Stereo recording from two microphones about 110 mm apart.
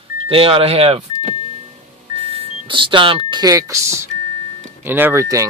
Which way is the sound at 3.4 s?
35° right (ahead or behind).